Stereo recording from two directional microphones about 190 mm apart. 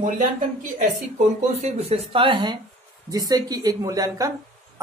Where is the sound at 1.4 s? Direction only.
35° right (ahead or behind).